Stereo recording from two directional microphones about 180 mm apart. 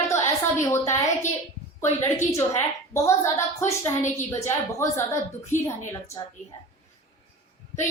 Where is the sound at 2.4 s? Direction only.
15° left (ahead or behind).